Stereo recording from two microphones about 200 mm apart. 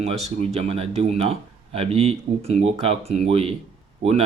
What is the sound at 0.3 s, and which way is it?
Speech, 30° right (ahead or behind).